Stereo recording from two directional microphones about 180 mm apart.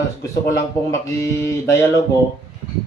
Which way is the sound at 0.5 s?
15° left (ahead or behind).